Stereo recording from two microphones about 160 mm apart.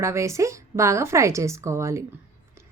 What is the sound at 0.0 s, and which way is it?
Speech, 15° right (ahead or behind).